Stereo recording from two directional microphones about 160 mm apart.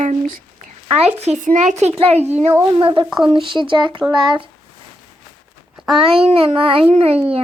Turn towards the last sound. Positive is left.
turn(degrees=-35)  # may be behind; listen again after turning